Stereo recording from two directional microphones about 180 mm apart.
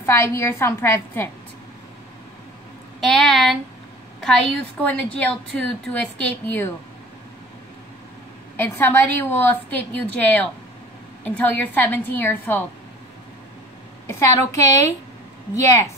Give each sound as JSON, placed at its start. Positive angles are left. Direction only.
{"t": 0.0, "sound": "a woman's voice", "side_deg": 15}
{"t": 3.0, "sound": "a woman's voice", "side_deg": 0}
{"t": 8.5, "sound": "a woman's voice", "side_deg": 10}
{"t": 14.5, "sound": "a woman's voice", "side_deg": 15}